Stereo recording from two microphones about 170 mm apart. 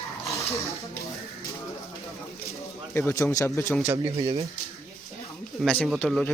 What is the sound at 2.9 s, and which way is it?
Speech, 15° left (ahead or behind).